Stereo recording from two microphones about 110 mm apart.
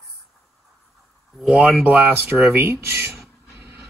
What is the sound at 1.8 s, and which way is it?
Speech, 15° right (ahead or behind).